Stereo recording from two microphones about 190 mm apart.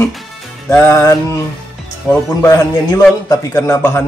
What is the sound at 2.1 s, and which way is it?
Speech, 5° right (ahead or behind).